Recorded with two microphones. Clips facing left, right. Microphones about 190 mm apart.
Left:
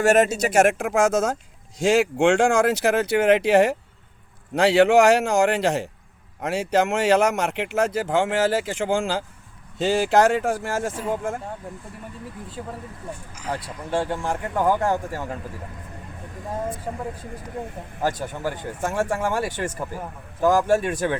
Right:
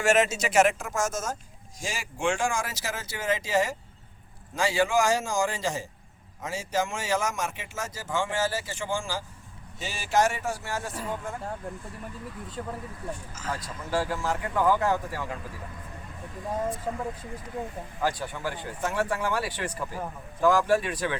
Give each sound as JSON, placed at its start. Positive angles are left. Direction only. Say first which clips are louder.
{"t": 0.0, "sound": "speech", "louder": "left 6 dB", "side_deg": 60}
{"t": 12.6, "sound": "speech", "louder": "left 1 dB", "side_deg": 10}
{"t": 13.5, "sound": "speech", "louder": "left 4 dB", "side_deg": 30}
{"t": 14.3, "sound": "speech", "louder": "left 2 dB", "side_deg": 50}
{"t": 18.0, "sound": "speech", "louder": "left 4 dB", "side_deg": 45}